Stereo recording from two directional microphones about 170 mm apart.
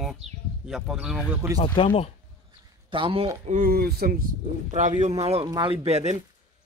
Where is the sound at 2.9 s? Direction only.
30° right (ahead or behind).